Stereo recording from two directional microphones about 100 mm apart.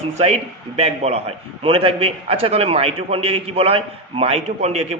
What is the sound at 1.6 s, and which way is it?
A man's voice, 70° right (ahead or behind).